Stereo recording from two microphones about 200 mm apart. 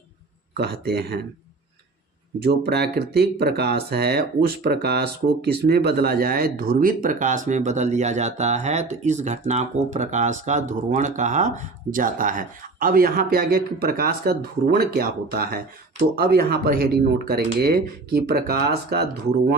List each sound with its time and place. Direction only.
0.5 s speech: 55° right (ahead or behind)
2.4 s speech: 55° right (ahead or behind)